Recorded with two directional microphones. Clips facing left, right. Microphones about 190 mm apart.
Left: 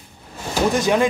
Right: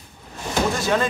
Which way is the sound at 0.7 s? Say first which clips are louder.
Left 4 dB; 15° left (ahead or behind).